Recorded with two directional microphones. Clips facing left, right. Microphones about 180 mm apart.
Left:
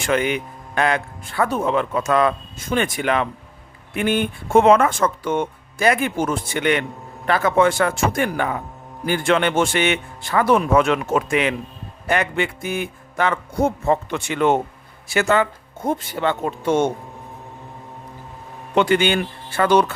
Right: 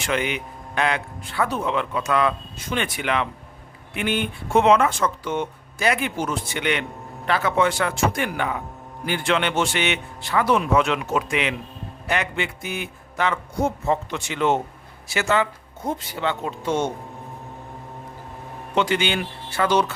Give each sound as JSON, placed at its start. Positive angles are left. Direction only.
{"t": 0.0, "sound": "speech", "side_deg": 45}
{"t": 18.7, "sound": "speech", "side_deg": 55}